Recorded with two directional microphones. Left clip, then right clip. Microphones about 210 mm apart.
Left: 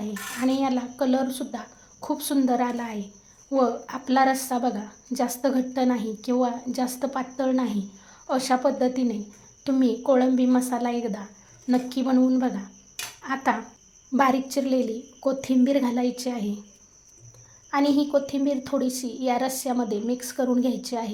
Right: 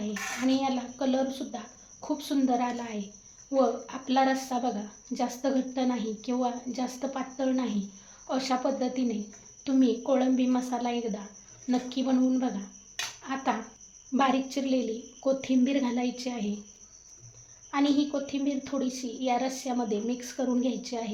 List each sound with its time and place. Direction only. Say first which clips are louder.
0.4 s a woman's voice: left 4 dB; 35° left (ahead or behind)
17.7 s a woman's voice: left 5 dB; 30° left (ahead or behind)